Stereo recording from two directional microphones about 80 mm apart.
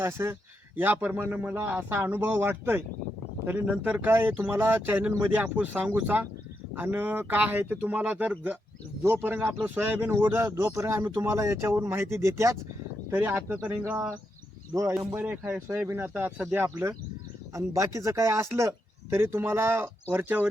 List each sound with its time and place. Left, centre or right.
0.0 s speech: right
0.8 s a man's voice: right
13.1 s a man's voice: right
15.1 s a man's voice: right
17.5 s speech: right